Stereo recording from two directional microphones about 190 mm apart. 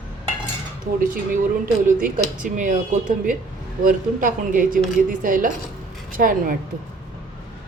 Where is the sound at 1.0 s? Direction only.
45° right (ahead or behind).